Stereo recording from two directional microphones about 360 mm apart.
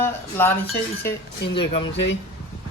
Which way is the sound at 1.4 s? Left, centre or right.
Left.